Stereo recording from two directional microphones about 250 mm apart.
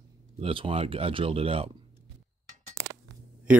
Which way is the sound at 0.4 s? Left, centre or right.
Right.